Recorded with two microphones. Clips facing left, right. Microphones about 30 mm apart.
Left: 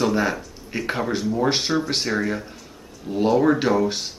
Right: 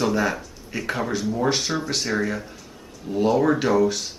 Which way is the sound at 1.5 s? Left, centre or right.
Left.